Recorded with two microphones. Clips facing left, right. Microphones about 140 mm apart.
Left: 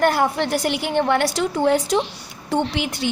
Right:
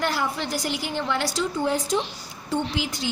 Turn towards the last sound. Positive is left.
turn(degrees=60)  # may be behind; listen again after turning